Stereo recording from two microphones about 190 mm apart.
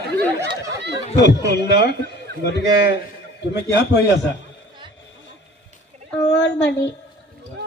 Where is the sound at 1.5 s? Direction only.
60° left (ahead or behind).